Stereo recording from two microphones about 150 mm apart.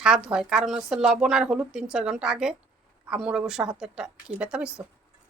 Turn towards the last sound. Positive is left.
turn(degrees=-5)  # may be behind; listen again after turning